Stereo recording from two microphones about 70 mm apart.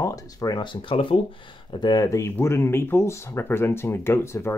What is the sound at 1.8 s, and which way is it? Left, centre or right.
Speech, left.